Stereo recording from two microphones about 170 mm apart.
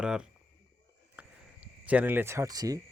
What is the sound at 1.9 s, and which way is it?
Speech, 10° right (ahead or behind).